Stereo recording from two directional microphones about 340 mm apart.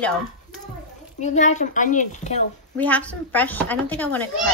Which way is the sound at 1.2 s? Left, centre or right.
Left.